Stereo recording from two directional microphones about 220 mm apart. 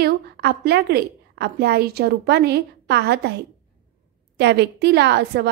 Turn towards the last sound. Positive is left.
turn(degrees=-50)  # may be behind; listen again after turning